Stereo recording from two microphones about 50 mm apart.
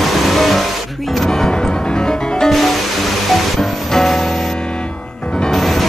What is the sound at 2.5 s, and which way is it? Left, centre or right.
Music, centre.